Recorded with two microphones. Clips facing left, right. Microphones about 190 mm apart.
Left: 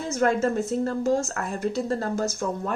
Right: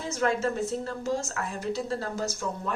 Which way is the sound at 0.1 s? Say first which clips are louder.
Left 4 dB; 50° left (ahead or behind).